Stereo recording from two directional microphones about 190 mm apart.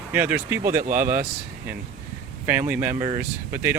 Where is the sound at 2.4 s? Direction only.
10° right (ahead or behind).